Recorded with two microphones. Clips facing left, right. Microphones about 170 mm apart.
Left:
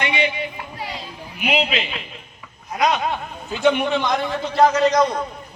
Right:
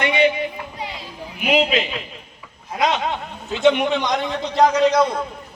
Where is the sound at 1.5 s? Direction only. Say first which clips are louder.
Right 3 dB; 40° right (ahead or behind).